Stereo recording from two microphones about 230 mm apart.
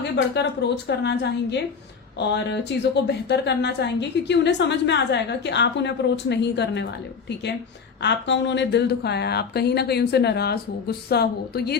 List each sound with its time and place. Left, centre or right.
0.3 s a woman's voice: left
8.0 s a woman's voice: left